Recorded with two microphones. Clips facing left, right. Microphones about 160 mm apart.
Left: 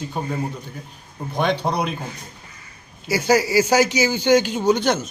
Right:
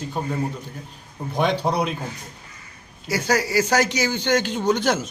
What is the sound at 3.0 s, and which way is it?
A man's voice, 5° left (ahead or behind).